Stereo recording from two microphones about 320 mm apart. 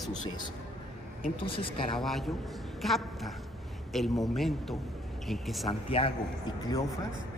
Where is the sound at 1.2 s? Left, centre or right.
Centre.